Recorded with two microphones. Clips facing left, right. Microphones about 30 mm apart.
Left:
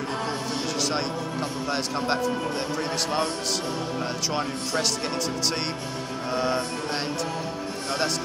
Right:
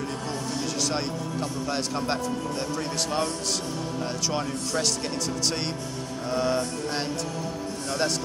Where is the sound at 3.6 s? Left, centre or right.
Left.